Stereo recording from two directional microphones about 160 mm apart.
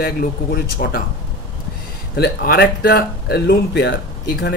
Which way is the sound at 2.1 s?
80° left.